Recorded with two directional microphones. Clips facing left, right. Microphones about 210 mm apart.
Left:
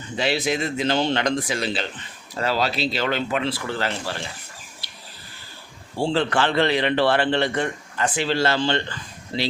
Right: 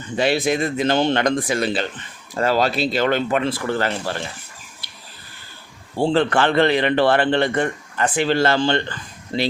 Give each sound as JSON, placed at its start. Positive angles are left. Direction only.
{"t": 0.2, "sound": "a man's voice", "side_deg": -50}
{"t": 6.0, "sound": "a man's voice", "side_deg": -55}